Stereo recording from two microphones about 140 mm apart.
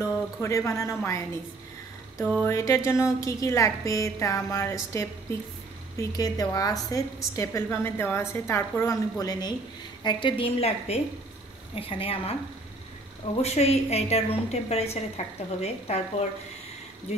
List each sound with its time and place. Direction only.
0.0 s a woman's voice: 20° left (ahead or behind)
2.2 s a sound: 10° left (ahead or behind)
2.5 s a woman's voice: 20° left (ahead or behind)
5.9 s a woman's voice: 25° left (ahead or behind); by 12.4 s 40° left (ahead or behind)
13.4 s a woman's voice: 50° left (ahead or behind)